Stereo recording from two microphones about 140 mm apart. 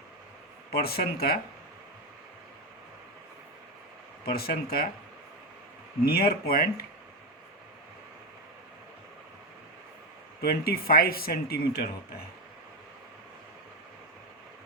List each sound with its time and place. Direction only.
0.7 s speech: 90° left
4.3 s speech: 90° left
6.1 s speech: 90° left
10.4 s speech: 90° left